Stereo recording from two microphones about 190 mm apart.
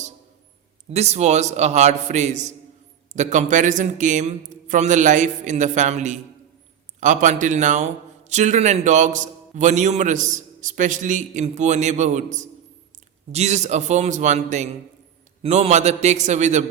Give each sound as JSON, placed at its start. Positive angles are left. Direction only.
{"t": 0.9, "sound": "a man's voice", "side_deg": -35}